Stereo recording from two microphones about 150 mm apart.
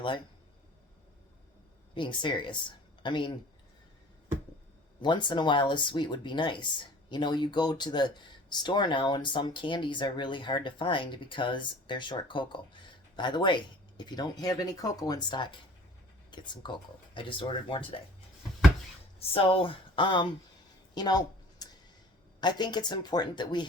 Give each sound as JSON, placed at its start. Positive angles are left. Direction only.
{"t": 2.0, "sound": "speech", "side_deg": 30}
{"t": 5.0, "sound": "speech", "side_deg": 30}
{"t": 19.3, "sound": "speech", "side_deg": 40}
{"t": 20.9, "sound": "a sound", "side_deg": 30}
{"t": 22.4, "sound": "speech", "side_deg": 30}